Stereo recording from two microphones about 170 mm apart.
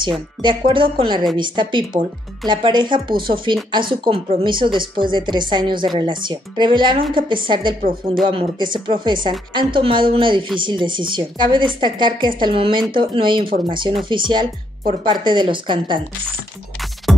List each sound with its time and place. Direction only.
0.4 s speech: 30° right (ahead or behind)